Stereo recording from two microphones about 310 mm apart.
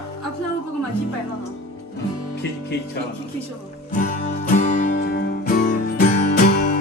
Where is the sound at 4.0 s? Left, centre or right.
Left.